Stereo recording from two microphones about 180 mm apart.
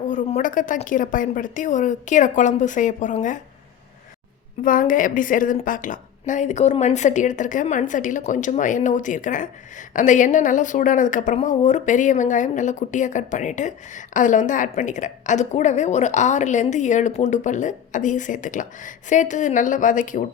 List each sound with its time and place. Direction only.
0.1 s a woman's voice: 45° left (ahead or behind)
4.6 s a woman's voice: 50° left (ahead or behind)